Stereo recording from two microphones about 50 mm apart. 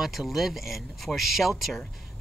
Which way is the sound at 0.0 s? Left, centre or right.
Centre.